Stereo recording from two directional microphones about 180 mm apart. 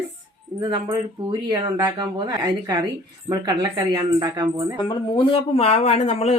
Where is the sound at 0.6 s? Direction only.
20° right (ahead or behind).